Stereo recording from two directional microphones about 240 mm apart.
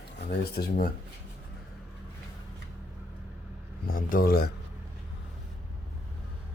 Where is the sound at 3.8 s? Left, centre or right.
Left.